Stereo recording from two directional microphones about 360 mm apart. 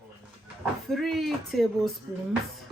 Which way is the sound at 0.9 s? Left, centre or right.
Centre.